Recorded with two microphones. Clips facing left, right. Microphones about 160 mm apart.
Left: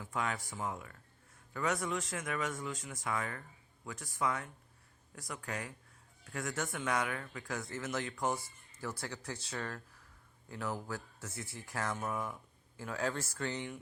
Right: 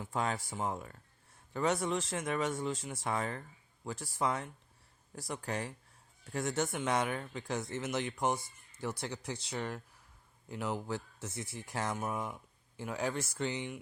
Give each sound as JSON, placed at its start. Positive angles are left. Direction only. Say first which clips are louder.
{"t": 0.0, "sound": "speech", "louder": "right 3 dB", "side_deg": -30}